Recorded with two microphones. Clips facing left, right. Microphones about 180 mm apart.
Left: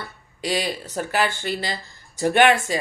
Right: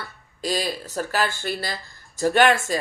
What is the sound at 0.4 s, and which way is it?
Speech, 20° left (ahead or behind).